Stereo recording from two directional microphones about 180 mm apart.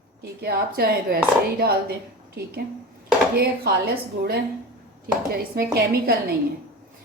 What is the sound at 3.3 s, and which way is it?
Speech, 60° right (ahead or behind).